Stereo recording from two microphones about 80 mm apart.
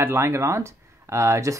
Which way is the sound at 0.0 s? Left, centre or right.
Right.